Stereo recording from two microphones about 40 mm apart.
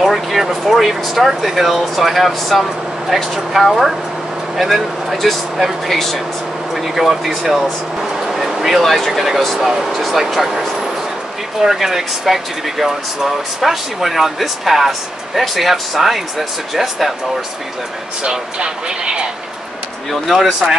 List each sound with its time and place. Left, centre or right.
0.0 s speech: centre
9.7 s speech: centre
11.6 s speech: centre
18.2 s speech: right